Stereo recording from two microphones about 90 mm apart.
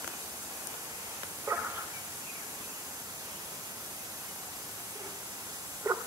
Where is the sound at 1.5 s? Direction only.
35° right (ahead or behind).